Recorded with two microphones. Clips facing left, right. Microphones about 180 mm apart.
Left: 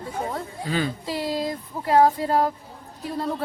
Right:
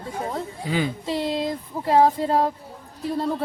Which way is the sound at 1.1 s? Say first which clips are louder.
Right 2 dB; 25° right (ahead or behind).